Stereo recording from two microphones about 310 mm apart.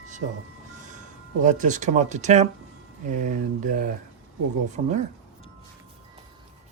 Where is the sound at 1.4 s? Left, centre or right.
Right.